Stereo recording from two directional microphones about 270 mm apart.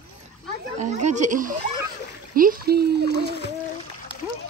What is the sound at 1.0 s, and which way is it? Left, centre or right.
Speech, right.